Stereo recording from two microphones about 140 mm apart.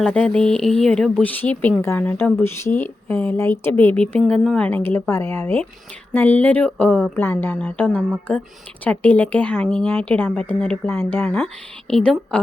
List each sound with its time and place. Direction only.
0.0 s a woman's voice: 5° left (ahead or behind)
11.9 s speech: 5° left (ahead or behind)